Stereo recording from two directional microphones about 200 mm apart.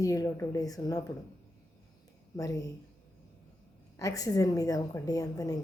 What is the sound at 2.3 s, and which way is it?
Speech, 15° left (ahead or behind).